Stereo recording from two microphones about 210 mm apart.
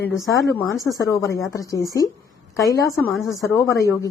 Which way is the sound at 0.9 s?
15° left (ahead or behind).